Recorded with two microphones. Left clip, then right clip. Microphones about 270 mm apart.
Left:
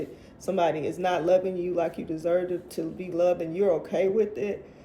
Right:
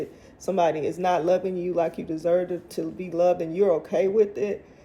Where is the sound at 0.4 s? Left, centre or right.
Right.